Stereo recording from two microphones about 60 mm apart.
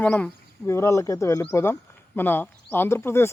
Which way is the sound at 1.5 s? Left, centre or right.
Left.